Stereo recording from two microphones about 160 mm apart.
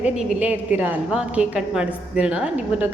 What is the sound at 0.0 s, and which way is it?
A woman's voice, 10° right (ahead or behind).